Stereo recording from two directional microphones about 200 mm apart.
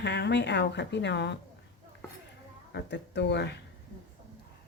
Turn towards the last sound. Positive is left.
turn(degrees=60)  # may be behind; listen again after turning